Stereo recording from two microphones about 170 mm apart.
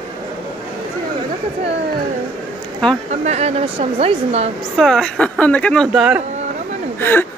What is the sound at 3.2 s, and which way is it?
A woman's voice, 40° right (ahead or behind).